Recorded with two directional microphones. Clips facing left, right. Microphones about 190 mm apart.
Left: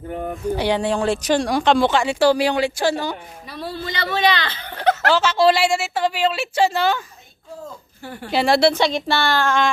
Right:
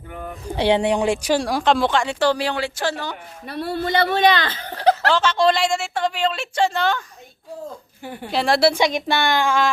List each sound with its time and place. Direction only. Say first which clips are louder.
0.1 s a sound: left 6 dB; 40° left (ahead or behind)
0.5 s speech: right 3 dB; 25° right (ahead or behind); by 3.2 s 10° left (ahead or behind)
3.4 s speech: right 5 dB; 60° right (ahead or behind); by 4.9 s 35° right (ahead or behind)
5.0 s a woman's voice: left 2 dB; 5° left (ahead or behind)
8.0 s speech: right 1 dB; 15° right (ahead or behind)
8.3 s speech: left 2 dB; centre (ahead or behind)
8.7 s speech: even; 15° right (ahead or behind)